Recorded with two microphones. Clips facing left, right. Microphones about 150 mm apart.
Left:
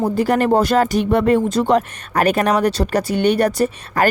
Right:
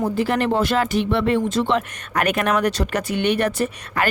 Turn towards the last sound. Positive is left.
turn(degrees=40)  # may be behind; listen again after turning